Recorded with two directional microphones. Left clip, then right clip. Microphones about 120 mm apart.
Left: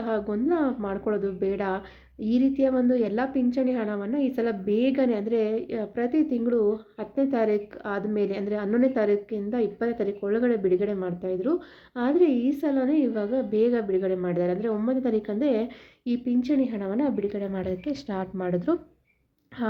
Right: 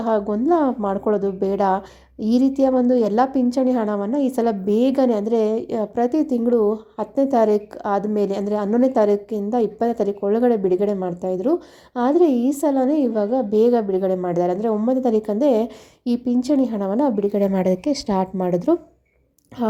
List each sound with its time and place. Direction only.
0.0 s a woman's voice: 45° right (ahead or behind)
6.6 s a woman's voice: 5° right (ahead or behind)
6.9 s a woman's voice: 50° right (ahead or behind)
17.3 s a woman's voice: 80° right; by 18.3 s 55° right (ahead or behind)
18.3 s a woman's voice: 45° right (ahead or behind)